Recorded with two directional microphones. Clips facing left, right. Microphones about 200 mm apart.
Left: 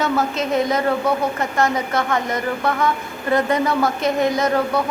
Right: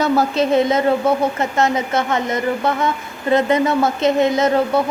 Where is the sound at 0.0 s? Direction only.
35° right (ahead or behind).